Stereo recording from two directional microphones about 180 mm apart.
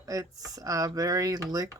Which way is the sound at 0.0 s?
20° right (ahead or behind).